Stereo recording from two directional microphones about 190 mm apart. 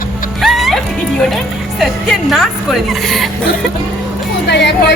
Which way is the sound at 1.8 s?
Centre (ahead or behind).